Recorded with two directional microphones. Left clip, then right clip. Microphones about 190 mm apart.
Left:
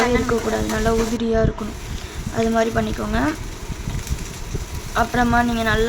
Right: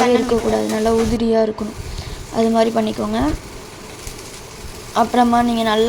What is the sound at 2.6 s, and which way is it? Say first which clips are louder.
Speech: right 3 dB; 15° right (ahead or behind).